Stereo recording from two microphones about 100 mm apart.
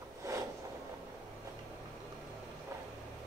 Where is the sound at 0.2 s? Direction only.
30° right (ahead or behind).